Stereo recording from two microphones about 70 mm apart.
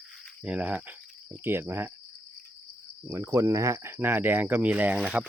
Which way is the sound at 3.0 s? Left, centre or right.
Right.